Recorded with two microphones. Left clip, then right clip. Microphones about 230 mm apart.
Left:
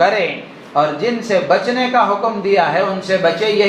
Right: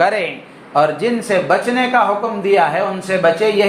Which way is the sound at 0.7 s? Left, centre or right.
Right.